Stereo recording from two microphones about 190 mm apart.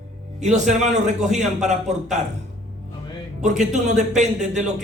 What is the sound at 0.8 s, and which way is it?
Speech, 35° right (ahead or behind).